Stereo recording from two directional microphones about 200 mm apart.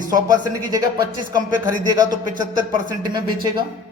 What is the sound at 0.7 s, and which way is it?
A man's voice, 20° right (ahead or behind).